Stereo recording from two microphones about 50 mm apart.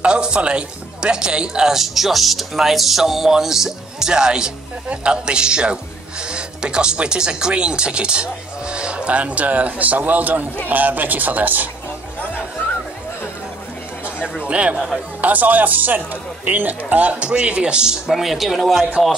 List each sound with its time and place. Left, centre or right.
0.0 s a man's voice: centre; by 11.7 s right
14.4 s a man's voice: right
18.0 s speech: centre